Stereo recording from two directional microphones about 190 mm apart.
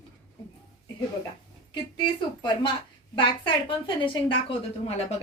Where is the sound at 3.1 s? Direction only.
25° left (ahead or behind).